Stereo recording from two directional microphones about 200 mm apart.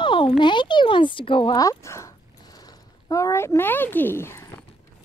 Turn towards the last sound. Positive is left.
turn(degrees=10)  # may be behind; listen again after turning